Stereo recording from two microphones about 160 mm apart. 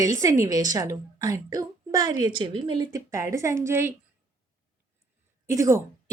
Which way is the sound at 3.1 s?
20° right (ahead or behind).